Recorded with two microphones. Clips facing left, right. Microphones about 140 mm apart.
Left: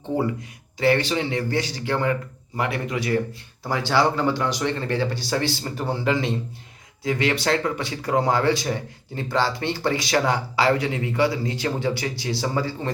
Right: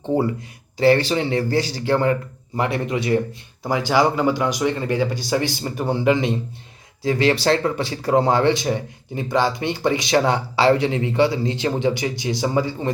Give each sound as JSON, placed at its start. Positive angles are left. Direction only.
{"t": 0.8, "sound": "speech", "side_deg": -30}
{"t": 7.0, "sound": "speech", "side_deg": -30}